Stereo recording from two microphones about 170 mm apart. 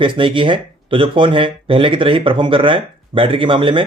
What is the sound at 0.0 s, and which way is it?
Speech, 30° right (ahead or behind).